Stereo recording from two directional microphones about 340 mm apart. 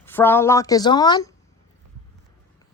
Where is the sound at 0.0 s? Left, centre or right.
Centre.